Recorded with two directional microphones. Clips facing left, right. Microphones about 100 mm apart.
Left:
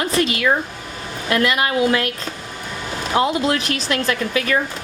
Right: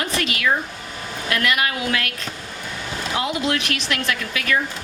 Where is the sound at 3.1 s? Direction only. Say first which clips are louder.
Left 5 dB; 30° left (ahead or behind).